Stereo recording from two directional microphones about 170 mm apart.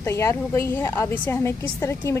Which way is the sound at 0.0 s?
15° left (ahead or behind).